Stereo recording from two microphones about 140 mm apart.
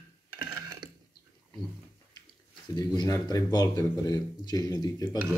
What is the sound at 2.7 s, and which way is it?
Speech, 30° left (ahead or behind).